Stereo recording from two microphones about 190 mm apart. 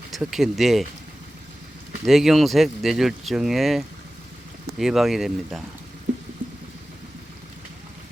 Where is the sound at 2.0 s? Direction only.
Centre (ahead or behind).